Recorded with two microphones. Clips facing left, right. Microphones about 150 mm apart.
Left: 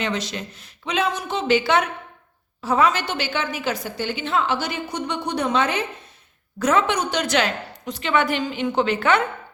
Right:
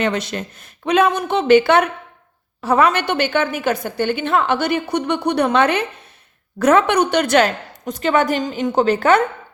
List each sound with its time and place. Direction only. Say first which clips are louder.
0.0 s a woman's voice: right 5 dB; 55° right (ahead or behind)